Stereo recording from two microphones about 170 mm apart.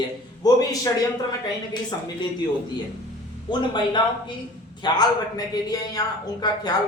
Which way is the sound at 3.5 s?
25° left (ahead or behind).